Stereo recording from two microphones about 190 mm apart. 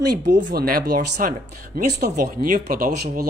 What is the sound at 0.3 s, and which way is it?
Speech, 50° right (ahead or behind).